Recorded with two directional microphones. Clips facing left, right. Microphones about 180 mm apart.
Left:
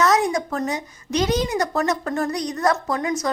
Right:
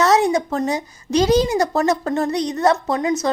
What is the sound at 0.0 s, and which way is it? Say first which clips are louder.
Speech: right 3 dB; 30° right (ahead or behind).